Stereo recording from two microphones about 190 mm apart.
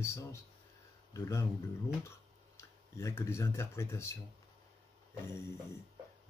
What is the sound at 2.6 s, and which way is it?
Speech, 15° left (ahead or behind).